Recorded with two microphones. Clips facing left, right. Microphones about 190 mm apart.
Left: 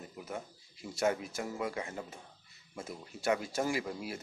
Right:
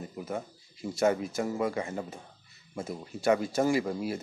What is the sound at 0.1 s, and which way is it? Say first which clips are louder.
Speech: right 5 dB; 40° right (ahead or behind).